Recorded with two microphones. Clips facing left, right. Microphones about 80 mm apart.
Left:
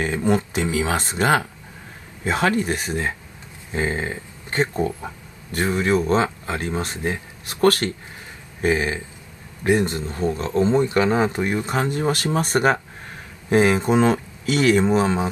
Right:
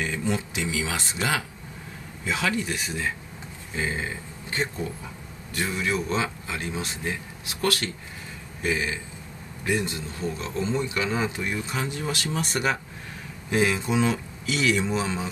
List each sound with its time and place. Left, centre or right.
0.0 s speech: left